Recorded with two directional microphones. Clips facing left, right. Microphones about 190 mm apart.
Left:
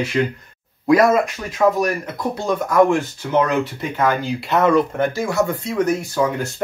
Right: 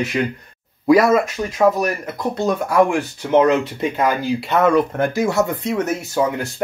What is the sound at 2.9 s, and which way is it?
Speech, 20° right (ahead or behind).